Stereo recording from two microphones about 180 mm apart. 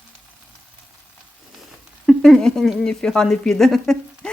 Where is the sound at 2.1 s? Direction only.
Centre (ahead or behind).